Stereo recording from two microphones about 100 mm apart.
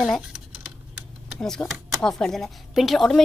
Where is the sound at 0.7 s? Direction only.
10° right (ahead or behind).